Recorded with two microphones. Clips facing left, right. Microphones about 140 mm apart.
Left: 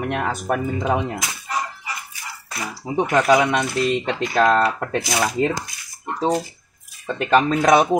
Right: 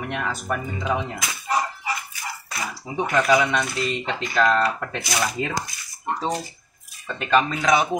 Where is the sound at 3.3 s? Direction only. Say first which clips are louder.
Left 3 dB; 45° left (ahead or behind).